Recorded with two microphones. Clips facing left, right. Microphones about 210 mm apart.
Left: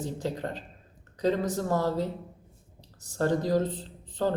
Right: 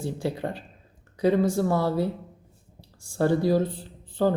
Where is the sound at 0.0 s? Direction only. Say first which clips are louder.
Right 3 dB; 10° right (ahead or behind).